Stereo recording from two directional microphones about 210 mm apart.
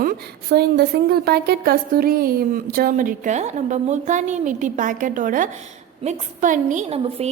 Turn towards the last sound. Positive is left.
turn(degrees=-30)  # may be behind; listen again after turning